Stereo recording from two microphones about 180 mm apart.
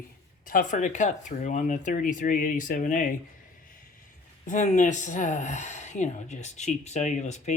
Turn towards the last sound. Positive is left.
turn(degrees=40)  # may be behind; listen again after turning